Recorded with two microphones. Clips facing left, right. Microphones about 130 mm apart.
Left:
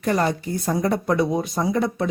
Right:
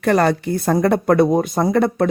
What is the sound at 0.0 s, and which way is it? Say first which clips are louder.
Speech: right 6 dB; 75° right (ahead or behind).